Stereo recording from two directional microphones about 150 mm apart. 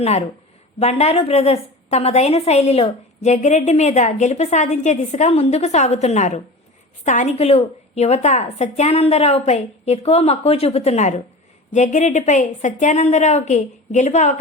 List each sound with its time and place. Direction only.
0.0 s a woman's voice: 45° left (ahead or behind)